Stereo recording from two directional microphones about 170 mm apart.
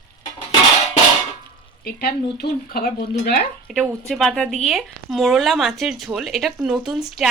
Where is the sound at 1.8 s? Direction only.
65° left (ahead or behind).